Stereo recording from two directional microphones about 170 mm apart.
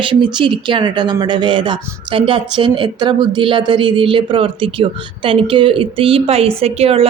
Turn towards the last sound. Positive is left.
turn(degrees=-35)  # may be behind; listen again after turning